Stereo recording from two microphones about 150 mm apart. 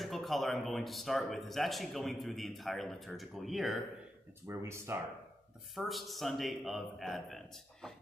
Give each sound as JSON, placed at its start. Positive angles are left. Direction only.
{"t": 0.0, "sound": "speech", "side_deg": 0}
{"t": 4.5, "sound": "speech", "side_deg": -20}
{"t": 5.9, "sound": "speech", "side_deg": 0}